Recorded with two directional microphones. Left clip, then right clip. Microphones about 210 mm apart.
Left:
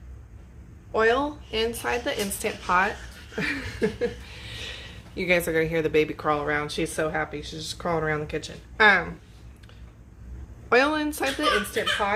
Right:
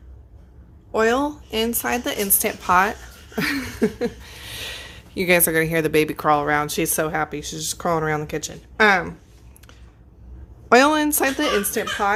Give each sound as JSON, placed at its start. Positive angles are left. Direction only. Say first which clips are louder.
{"t": 0.9, "sound": "speech", "louder": "right 3 dB", "side_deg": -50}
{"t": 10.7, "sound": "speech", "louder": "right 6 dB", "side_deg": -55}